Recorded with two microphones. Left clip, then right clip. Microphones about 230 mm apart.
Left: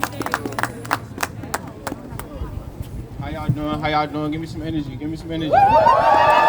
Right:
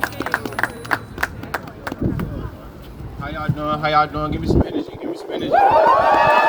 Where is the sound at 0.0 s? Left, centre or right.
Left.